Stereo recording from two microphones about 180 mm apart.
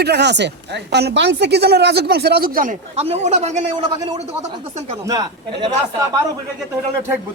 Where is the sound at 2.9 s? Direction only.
35° right (ahead or behind).